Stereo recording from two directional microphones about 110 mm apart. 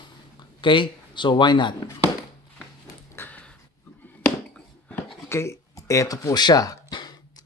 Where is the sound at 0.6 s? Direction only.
45° left (ahead or behind).